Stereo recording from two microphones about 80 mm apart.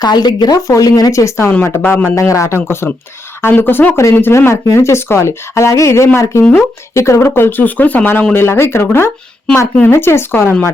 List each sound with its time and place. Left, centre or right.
0.0 s speech: left
0.7 s speech: left
1.8 s speech: left
2.1 s speech: left